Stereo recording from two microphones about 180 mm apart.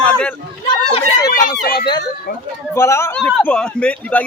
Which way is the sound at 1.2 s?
50° left (ahead or behind).